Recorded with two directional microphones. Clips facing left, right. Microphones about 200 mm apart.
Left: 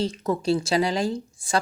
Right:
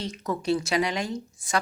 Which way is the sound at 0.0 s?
30° left (ahead or behind).